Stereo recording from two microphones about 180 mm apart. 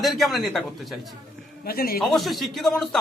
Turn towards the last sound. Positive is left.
turn(degrees=5)  # may be behind; listen again after turning